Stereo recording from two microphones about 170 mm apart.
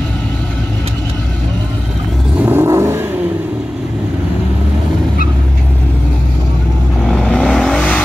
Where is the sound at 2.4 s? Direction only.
15° right (ahead or behind).